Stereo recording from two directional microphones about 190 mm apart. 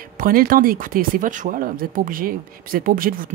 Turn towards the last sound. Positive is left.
turn(degrees=-50)  # may be behind; listen again after turning